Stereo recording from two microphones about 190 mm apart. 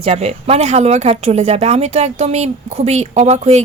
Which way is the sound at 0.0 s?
35° right (ahead or behind).